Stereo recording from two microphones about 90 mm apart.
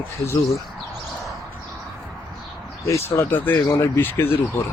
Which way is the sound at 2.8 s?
35° left (ahead or behind).